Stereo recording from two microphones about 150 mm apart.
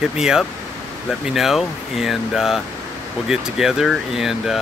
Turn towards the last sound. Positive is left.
turn(degrees=0)  # may be behind; listen again after turning